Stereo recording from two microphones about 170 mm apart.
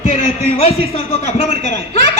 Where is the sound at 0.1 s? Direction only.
35° left (ahead or behind).